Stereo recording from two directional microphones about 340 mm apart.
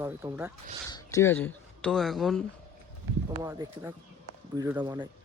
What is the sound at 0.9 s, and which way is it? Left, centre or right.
Speech, centre.